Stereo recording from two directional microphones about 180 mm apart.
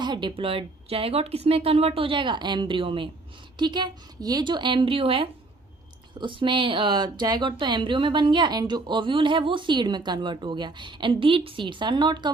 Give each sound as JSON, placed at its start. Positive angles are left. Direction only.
{"t": 0.0, "sound": "a woman's voice", "side_deg": -25}